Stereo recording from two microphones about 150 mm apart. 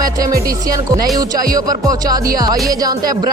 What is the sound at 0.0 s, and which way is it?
Speech, 25° right (ahead or behind).